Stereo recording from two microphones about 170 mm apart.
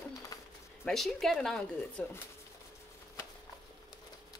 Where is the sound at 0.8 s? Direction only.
Centre (ahead or behind).